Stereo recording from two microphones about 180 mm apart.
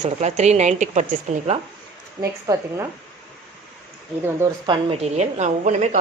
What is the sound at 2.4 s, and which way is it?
Speech, 20° right (ahead or behind).